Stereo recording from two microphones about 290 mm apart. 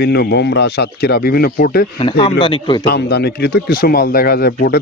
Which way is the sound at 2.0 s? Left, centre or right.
Centre.